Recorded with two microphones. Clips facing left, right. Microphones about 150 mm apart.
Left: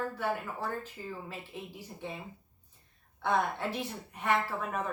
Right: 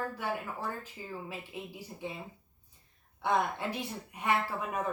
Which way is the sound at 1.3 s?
10° right (ahead or behind).